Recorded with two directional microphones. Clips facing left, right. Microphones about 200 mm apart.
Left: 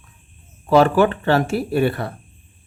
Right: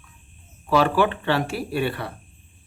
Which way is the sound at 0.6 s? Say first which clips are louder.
Left 5 dB; 45° left (ahead or behind).